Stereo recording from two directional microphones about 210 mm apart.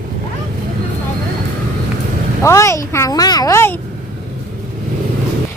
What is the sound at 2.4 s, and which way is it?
A woman's voice, 15° left (ahead or behind).